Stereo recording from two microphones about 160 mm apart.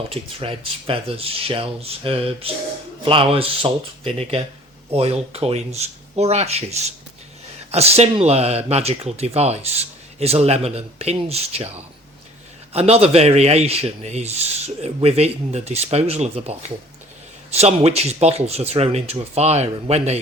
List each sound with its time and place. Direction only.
0.1 s speech: 35° right (ahead or behind)
12.7 s speech: 40° right (ahead or behind)